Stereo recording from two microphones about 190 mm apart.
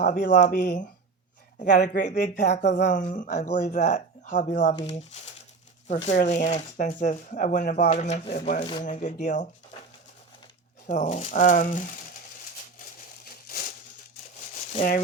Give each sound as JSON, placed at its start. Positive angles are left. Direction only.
{"t": 0.0, "sound": "speech", "side_deg": 45}
{"t": 0.3, "sound": "speech", "side_deg": 55}
{"t": 2.3, "sound": "speech", "side_deg": 65}
{"t": 3.2, "sound": "speech", "side_deg": 45}
{"t": 4.7, "sound": "speech", "side_deg": 30}
{"t": 7.9, "sound": "speech", "side_deg": 35}
{"t": 10.8, "sound": "speech", "side_deg": 40}
{"t": 13.2, "sound": "crumpling", "side_deg": 50}
{"t": 14.7, "sound": "speech", "side_deg": 40}